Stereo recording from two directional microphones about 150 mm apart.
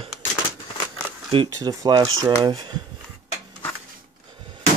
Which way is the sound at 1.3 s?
30° right (ahead or behind).